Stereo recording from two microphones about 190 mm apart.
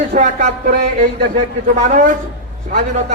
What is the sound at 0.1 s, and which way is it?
Music, 40° right (ahead or behind).